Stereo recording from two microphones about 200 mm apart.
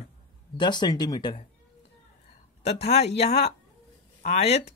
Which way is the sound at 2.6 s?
30° left (ahead or behind).